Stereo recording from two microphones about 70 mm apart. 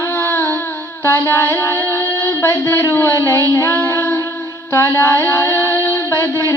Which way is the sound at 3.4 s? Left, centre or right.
Left.